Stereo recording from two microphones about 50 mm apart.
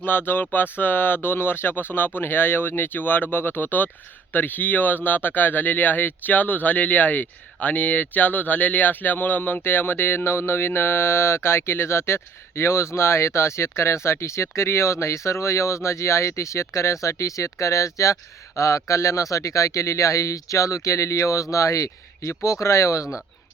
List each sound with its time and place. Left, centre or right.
0.0 s speech: left
22.6 s speech: left